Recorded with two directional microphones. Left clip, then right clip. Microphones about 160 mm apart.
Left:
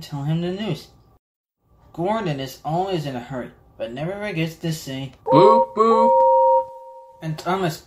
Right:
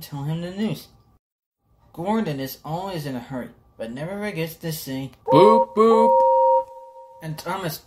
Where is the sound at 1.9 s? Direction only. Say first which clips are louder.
Left 2 dB; 40° right (ahead or behind).